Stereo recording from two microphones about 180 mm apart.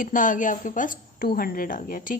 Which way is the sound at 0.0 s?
45° left (ahead or behind).